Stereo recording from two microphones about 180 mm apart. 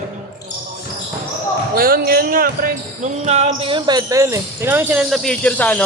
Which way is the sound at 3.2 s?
35° right (ahead or behind).